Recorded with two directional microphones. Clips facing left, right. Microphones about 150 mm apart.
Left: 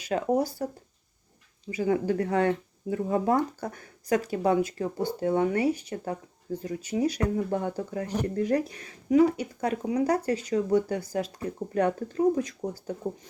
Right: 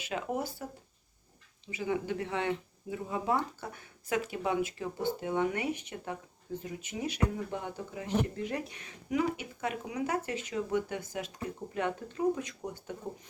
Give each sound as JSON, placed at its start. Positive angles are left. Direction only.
{"t": 0.0, "sound": "speech", "side_deg": 40}
{"t": 1.7, "sound": "speech", "side_deg": 45}